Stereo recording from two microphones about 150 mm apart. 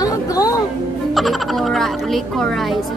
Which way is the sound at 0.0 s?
25° left (ahead or behind).